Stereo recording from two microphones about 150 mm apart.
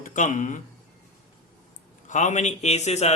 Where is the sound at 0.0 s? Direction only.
60° left (ahead or behind).